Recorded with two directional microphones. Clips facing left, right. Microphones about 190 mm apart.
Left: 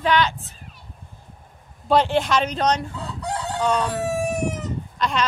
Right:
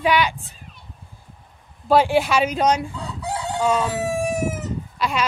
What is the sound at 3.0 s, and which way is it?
Chicken, centre (ahead or behind).